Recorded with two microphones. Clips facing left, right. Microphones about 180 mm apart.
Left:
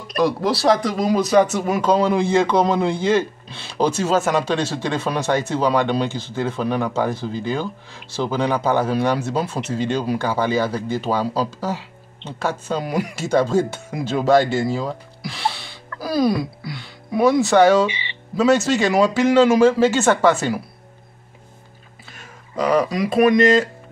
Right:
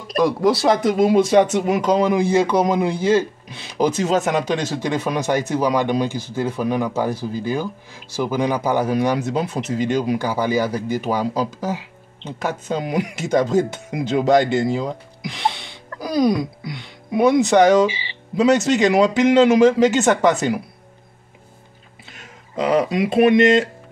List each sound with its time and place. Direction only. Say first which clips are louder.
0.5 s speech: right 2 dB; 20° right (ahead or behind)
22.6 s speech: right 1 dB; 25° right (ahead or behind)